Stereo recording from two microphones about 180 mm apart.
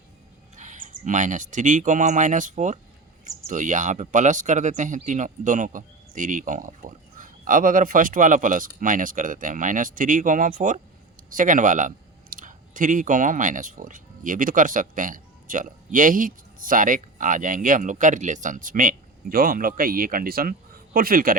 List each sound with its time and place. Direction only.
0.5 s speech: 45° right (ahead or behind)